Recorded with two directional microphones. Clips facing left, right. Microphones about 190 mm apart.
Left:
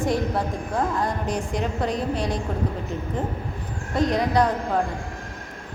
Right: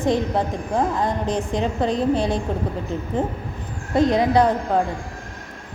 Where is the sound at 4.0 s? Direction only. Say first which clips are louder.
Right 4 dB; 25° right (ahead or behind).